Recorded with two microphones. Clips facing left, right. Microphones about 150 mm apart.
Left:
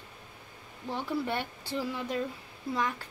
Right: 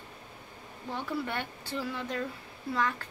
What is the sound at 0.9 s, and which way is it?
Speech, 15° left (ahead or behind).